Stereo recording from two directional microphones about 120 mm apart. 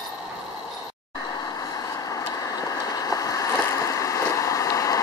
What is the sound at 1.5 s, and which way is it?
Vehicle, 30° left (ahead or behind).